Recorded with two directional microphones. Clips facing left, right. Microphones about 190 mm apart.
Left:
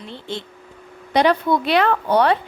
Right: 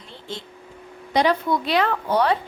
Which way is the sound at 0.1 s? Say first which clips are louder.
Left 4 dB; 65° left (ahead or behind).